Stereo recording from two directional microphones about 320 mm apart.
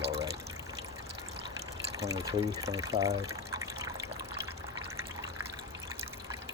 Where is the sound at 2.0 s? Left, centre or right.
Centre.